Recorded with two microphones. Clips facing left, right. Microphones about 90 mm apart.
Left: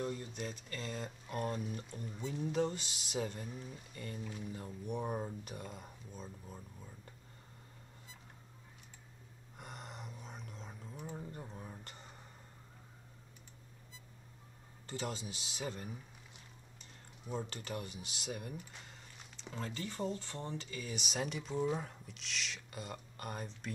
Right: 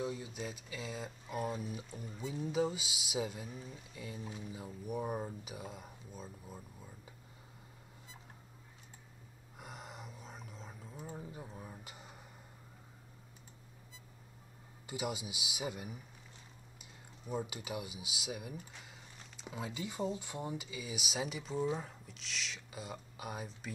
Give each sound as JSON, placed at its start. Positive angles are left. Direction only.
{"t": 0.0, "sound": "speech", "side_deg": -5}
{"t": 9.6, "sound": "a sound", "side_deg": 0}
{"t": 14.9, "sound": "a man's voice", "side_deg": -10}
{"t": 17.3, "sound": "speech", "side_deg": -10}